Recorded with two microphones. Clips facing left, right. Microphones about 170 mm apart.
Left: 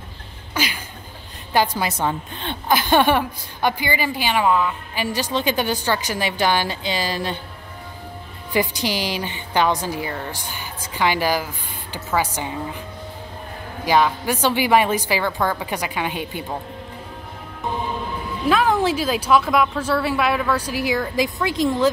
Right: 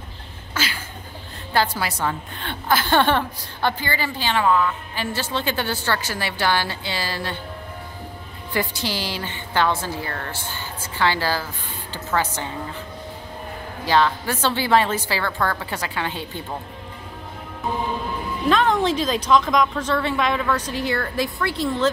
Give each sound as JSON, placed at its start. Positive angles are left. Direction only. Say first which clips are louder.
{"t": 0.6, "sound": "a sound", "louder": "left 3 dB", "side_deg": 15}
{"t": 1.5, "sound": "a woman's voice", "louder": "left 2 dB", "side_deg": 15}
{"t": 8.5, "sound": "a woman's voice", "louder": "left 4 dB", "side_deg": 15}
{"t": 13.8, "sound": "a woman's voice", "louder": "left 1 dB", "side_deg": 15}
{"t": 18.5, "sound": "a woman's voice", "louder": "left 1 dB", "side_deg": 5}